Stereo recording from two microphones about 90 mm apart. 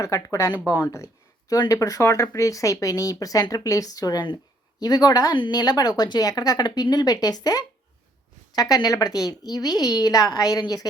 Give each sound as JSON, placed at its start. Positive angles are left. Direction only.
{"t": 0.0, "sound": "a woman's voice", "side_deg": 35}
{"t": 5.3, "sound": "a woman's voice", "side_deg": 55}